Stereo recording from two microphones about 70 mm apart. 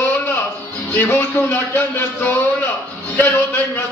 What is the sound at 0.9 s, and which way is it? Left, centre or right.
Music, left.